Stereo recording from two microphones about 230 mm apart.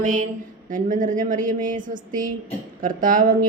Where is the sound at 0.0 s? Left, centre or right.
Right.